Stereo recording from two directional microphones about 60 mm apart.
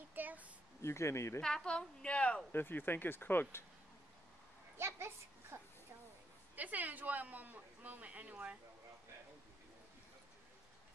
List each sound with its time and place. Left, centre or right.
0.1 s a sound: right
0.7 s speech: left
1.4 s a woman's voice: centre
2.5 s speech: left
4.7 s children playing: right
6.5 s speech: right